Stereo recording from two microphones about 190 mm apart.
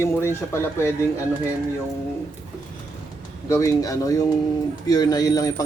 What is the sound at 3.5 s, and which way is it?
A man's voice, 15° left (ahead or behind).